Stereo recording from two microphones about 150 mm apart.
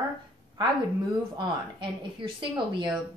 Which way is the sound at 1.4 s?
35° right (ahead or behind).